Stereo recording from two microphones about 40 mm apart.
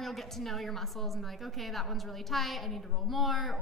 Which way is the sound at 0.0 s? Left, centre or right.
Centre.